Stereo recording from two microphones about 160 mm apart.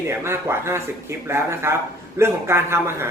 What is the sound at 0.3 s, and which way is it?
A man's voice, 15° right (ahead or behind).